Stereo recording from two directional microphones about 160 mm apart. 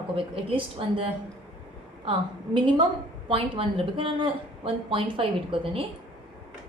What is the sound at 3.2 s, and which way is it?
Speech, 35° right (ahead or behind).